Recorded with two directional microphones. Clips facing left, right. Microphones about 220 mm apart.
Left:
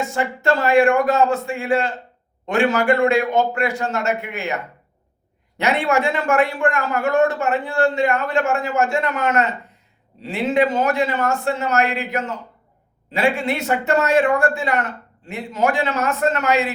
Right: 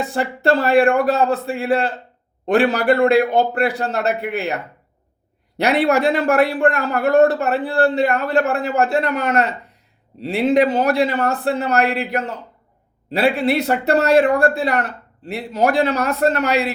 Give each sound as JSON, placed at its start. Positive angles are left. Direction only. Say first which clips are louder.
{"t": 0.0, "sound": "speech", "louder": "right 2 dB", "side_deg": -35}